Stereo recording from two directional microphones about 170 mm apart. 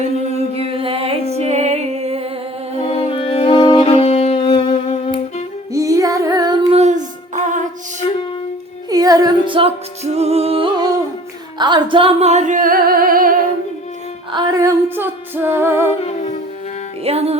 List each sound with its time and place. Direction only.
0.5 s music: 35° right (ahead or behind)
2.7 s music: 35° left (ahead or behind)
5.7 s music: 20° right (ahead or behind)
6.7 s child singing: 40° right (ahead or behind)
8.9 s music: 20° right (ahead or behind)
11.6 s singing: 30° right (ahead or behind); by 13.3 s 55° right (ahead or behind)
14.3 s female singing: 20° right (ahead or behind)
15.9 s music: 40° left (ahead or behind)
17.0 s music: 35° right (ahead or behind)